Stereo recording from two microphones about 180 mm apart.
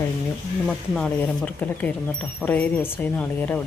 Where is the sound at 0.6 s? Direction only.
5° left (ahead or behind).